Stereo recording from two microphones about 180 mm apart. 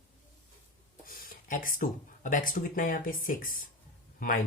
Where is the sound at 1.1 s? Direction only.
50° left (ahead or behind).